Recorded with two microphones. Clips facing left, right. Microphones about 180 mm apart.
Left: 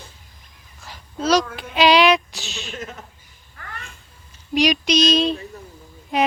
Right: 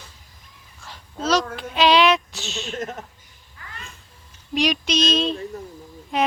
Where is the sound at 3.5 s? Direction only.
50° left (ahead or behind).